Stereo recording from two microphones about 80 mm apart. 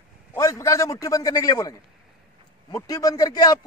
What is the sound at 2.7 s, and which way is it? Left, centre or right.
Speech, left.